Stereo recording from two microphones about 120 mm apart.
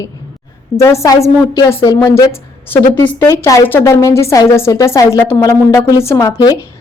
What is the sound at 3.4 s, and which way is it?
A woman's voice, 30° left (ahead or behind).